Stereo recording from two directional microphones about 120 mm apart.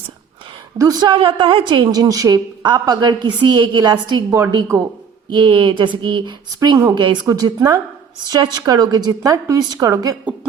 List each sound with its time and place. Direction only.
0.8 s speech: 30° right (ahead or behind)
1.1 s a woman's voice: 45° right (ahead or behind)
6.6 s a woman's voice: 30° right (ahead or behind)